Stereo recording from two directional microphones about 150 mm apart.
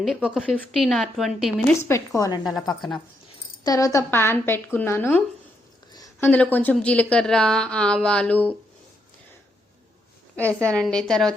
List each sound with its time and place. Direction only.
0.0 s a woman's voice: 5° right (ahead or behind)
1.6 s speech: 15° left (ahead or behind)
3.6 s speech: 25° left (ahead or behind)
10.3 s a woman's voice: 10° left (ahead or behind)